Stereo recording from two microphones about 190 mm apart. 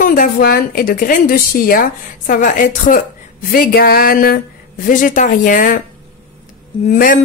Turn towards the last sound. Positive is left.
turn(degrees=45)  # may be behind; listen again after turning